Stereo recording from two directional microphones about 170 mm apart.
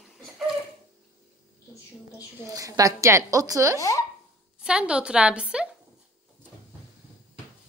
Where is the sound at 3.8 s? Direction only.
20° left (ahead or behind).